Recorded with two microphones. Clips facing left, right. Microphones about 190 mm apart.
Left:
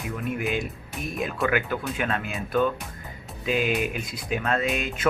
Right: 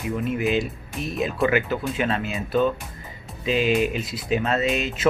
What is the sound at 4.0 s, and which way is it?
Speech, 50° left (ahead or behind).